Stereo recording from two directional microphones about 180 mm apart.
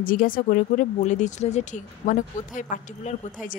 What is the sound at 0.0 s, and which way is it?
Speech, 50° left (ahead or behind).